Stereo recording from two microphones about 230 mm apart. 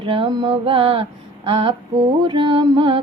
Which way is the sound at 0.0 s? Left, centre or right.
Right.